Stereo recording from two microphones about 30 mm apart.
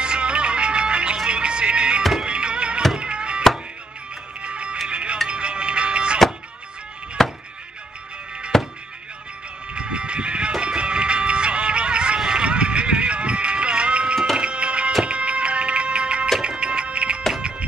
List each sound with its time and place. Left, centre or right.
0.0 s music: right
7.2 s music: centre
8.5 s music: centre
9.8 s sheep: right
10.6 s music: right